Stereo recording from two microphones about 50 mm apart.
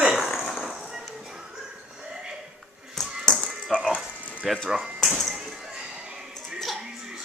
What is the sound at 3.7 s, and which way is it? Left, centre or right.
Rattle, centre.